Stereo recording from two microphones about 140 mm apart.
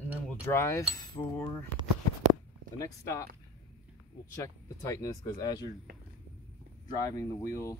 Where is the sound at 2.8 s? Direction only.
20° left (ahead or behind).